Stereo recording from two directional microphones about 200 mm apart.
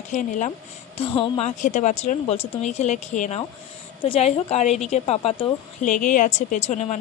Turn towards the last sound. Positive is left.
turn(degrees=35)  # may be behind; listen again after turning